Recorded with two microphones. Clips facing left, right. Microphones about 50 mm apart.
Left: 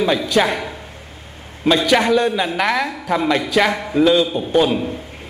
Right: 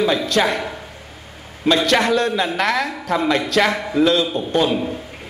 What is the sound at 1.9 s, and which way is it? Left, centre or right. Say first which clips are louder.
A man's voice: left 2 dB; centre.